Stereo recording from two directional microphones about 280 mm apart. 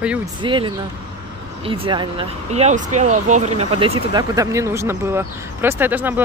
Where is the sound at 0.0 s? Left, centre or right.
Centre.